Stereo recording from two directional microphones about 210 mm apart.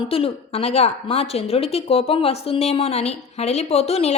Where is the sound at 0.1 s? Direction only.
30° left (ahead or behind).